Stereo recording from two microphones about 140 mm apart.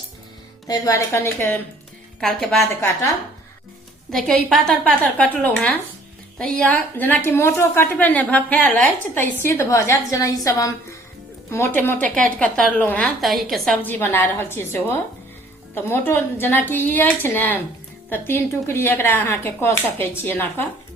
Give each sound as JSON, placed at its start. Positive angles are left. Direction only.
{"t": 0.7, "sound": "a woman's voice", "side_deg": 25}
{"t": 2.2, "sound": "a woman's voice", "side_deg": 5}
{"t": 2.6, "sound": "a woman's voice", "side_deg": 20}
{"t": 4.1, "sound": "a woman's voice", "side_deg": 5}
{"t": 13.8, "sound": "a woman's voice", "side_deg": 15}